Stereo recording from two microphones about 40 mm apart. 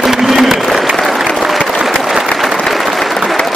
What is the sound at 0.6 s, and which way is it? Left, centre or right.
Applause, centre.